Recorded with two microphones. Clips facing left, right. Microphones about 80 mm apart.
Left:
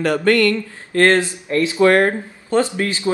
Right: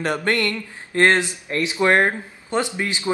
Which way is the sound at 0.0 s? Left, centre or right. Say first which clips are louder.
Left 6 dB; right.